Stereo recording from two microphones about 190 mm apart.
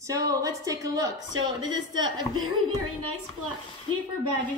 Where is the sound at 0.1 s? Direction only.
15° right (ahead or behind).